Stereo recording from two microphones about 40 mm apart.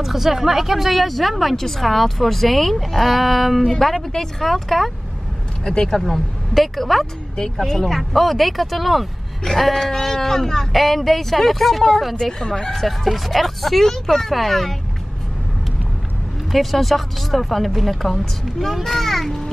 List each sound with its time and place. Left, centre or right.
0.0 s speech: centre
3.7 s speech: centre
5.7 s speech: centre
9.4 s speech: centre
12.2 s speech: centre
12.7 s speech: centre
16.5 s speech: centre